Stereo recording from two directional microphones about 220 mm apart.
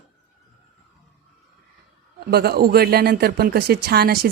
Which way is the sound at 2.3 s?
45° right (ahead or behind).